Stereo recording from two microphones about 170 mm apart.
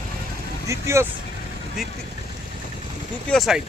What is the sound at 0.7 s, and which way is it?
Speech, 15° right (ahead or behind).